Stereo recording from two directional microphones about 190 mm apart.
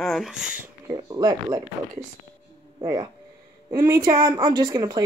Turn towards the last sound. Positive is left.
turn(degrees=-20)  # may be behind; listen again after turning